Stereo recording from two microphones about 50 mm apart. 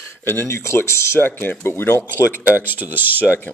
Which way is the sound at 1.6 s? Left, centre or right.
Left.